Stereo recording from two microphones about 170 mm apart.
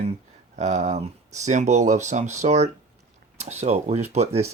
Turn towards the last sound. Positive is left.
turn(degrees=-40)  # may be behind; listen again after turning